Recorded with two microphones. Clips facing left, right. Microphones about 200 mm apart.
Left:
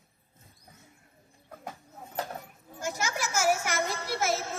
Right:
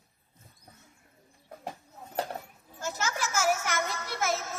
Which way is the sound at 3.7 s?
30° left (ahead or behind).